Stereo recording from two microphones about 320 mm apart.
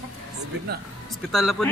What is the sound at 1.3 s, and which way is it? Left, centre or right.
Speech, centre.